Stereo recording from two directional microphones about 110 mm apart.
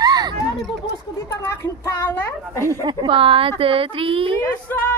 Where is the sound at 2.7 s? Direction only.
40° right (ahead or behind); by 4.4 s 55° right (ahead or behind).